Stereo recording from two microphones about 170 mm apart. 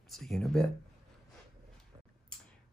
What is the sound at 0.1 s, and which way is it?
Speech, centre (ahead or behind).